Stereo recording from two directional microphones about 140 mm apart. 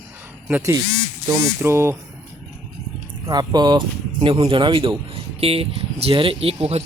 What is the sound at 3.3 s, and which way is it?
Speech, 30° right (ahead or behind).